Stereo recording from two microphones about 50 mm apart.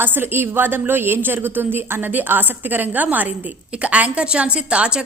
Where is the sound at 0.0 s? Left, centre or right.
Right.